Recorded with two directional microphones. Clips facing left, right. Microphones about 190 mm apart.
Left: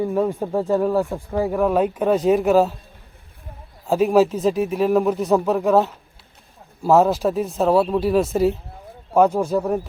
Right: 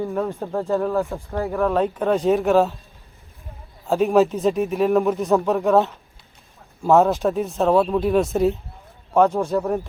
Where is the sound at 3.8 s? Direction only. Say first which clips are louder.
Left 1 dB; centre (ahead or behind).